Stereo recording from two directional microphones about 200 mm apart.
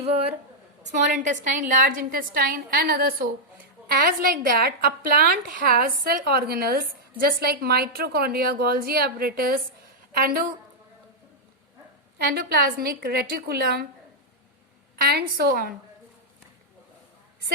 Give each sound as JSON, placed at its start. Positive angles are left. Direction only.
{"t": 0.0, "sound": "a woman's voice", "side_deg": -30}
{"t": 12.2, "sound": "a woman's voice", "side_deg": -50}
{"t": 15.1, "sound": "a woman's voice", "side_deg": -50}